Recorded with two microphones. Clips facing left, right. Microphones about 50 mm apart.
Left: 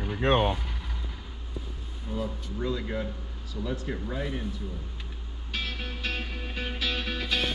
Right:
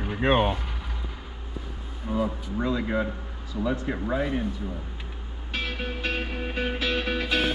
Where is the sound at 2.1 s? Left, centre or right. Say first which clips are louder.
Right 6 dB; right.